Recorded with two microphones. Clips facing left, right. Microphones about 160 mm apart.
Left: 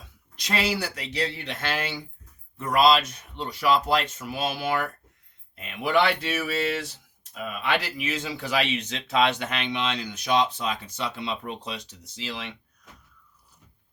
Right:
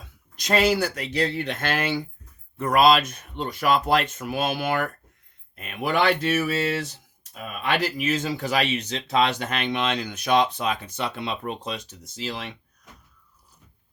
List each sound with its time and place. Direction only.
0.3 s speech: 45° right (ahead or behind)